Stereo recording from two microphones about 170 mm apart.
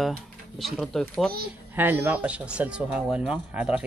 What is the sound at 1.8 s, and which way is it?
Speech, 10° right (ahead or behind).